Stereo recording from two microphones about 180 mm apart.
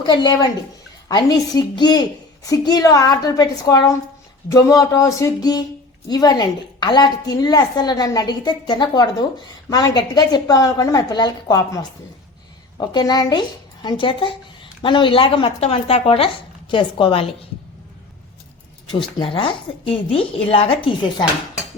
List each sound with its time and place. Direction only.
0.0 s a woman's voice: 25° left (ahead or behind)
18.9 s a woman's voice: 30° left (ahead or behind)